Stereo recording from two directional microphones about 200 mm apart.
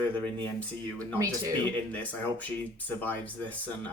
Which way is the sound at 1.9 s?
10° left (ahead or behind).